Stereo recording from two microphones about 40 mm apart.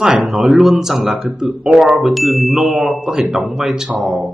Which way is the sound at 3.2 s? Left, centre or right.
Right.